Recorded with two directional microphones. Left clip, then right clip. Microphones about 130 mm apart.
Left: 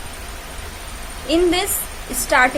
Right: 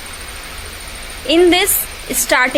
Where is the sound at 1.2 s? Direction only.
50° right (ahead or behind).